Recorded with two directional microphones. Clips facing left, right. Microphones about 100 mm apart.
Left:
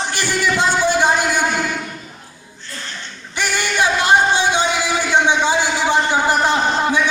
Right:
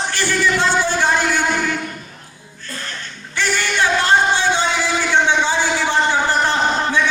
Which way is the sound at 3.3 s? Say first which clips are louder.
Even; 15° left (ahead or behind).